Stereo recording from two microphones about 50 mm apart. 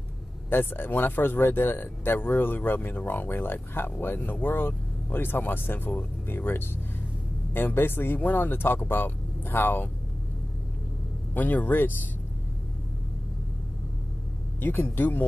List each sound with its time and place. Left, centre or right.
0.5 s speech: left
11.3 s speech: left
14.6 s speech: left